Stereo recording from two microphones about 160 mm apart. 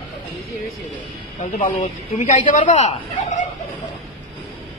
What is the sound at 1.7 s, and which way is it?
Speech, 45° left (ahead or behind).